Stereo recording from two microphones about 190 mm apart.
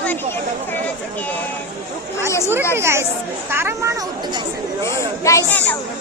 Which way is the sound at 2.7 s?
15° right (ahead or behind).